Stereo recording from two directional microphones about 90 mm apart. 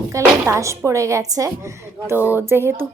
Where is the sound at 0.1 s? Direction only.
35° right (ahead or behind).